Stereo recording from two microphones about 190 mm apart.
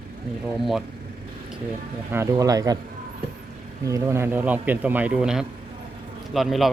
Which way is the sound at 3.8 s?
15° right (ahead or behind).